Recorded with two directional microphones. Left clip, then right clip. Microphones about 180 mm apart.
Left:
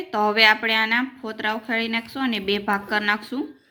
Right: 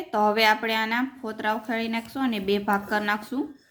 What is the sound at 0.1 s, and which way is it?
A woman's voice, 5° right (ahead or behind).